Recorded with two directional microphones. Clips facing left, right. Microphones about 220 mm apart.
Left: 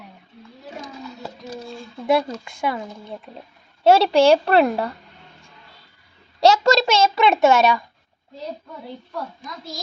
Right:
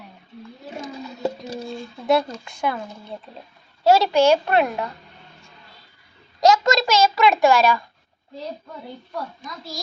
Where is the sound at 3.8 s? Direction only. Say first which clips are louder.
Left 2 dB; 30° left (ahead or behind).